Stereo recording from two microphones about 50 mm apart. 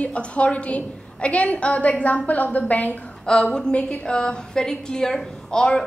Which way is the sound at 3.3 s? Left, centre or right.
Centre.